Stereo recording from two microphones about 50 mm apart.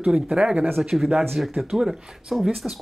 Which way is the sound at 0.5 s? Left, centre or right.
Right.